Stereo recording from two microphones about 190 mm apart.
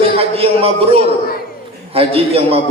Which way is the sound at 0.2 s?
30° right (ahead or behind).